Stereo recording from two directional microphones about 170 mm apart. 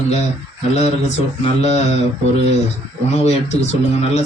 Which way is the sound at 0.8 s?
40° left (ahead or behind).